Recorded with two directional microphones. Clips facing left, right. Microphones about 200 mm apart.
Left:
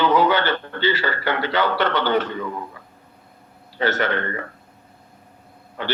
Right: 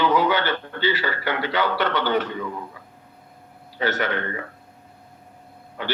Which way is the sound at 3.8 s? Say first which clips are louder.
Left 2 dB; 55° left (ahead or behind).